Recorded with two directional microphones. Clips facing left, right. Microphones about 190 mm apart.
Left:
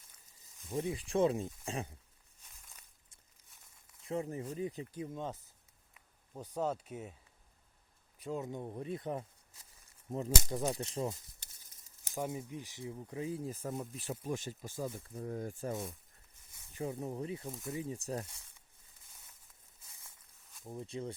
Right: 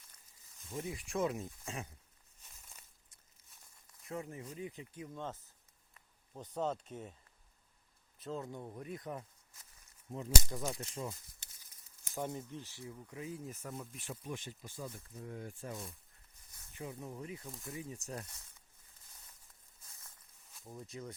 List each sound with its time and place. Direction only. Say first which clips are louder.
0.8 s speech: left 5 dB; 30° left (ahead or behind)
4.0 s speech: left 6 dB; 30° left (ahead or behind)
5.0 s speech: left 3 dB; 15° left (ahead or behind)
8.2 s speech: left 3 dB; 15° left (ahead or behind)
10.1 s speech: left 3 dB; 40° left (ahead or behind)
12.1 s speech: left 2 dB; 10° left (ahead or behind)
13.0 s speech: left 6 dB; 30° left (ahead or behind)
20.7 s speech: left 5 dB; 25° left (ahead or behind)